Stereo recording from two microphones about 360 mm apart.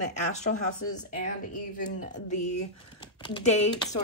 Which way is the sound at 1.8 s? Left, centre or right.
Left.